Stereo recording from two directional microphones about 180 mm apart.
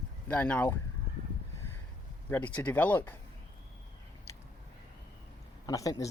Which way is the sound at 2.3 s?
10° left (ahead or behind).